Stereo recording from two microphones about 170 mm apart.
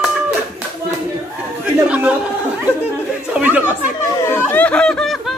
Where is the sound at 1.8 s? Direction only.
10° right (ahead or behind).